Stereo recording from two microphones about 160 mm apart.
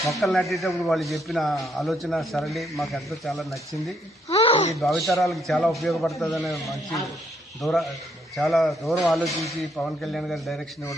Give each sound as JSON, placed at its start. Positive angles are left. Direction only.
{"t": 0.1, "sound": "a man's voice", "side_deg": 0}
{"t": 4.3, "sound": "a sound", "side_deg": 35}
{"t": 4.8, "sound": "a man's voice", "side_deg": 0}